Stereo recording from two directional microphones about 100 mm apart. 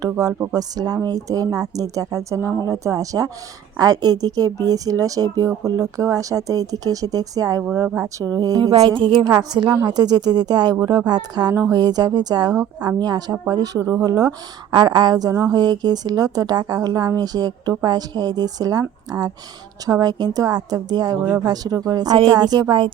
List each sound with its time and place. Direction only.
0.0 s a woman's voice: 40° right (ahead or behind)
8.9 s speech: 55° right (ahead or behind)
9.2 s a woman's voice: 40° right (ahead or behind)